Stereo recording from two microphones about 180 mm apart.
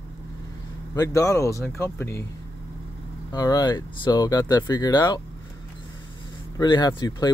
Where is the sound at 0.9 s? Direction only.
20° left (ahead or behind).